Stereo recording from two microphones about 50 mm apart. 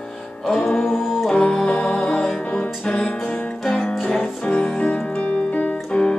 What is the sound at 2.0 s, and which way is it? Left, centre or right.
Music, centre.